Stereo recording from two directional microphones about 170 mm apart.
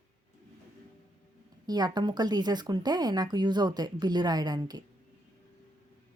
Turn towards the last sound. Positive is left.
turn(degrees=-25)  # may be behind; listen again after turning